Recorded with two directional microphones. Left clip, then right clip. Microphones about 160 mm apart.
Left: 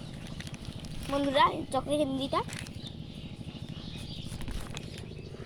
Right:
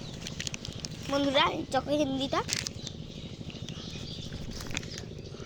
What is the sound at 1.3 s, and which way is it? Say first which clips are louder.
A woman's voice: left 2 dB; 25° right (ahead or behind).